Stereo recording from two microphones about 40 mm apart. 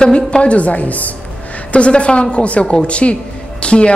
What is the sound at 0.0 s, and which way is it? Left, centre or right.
Speech, left.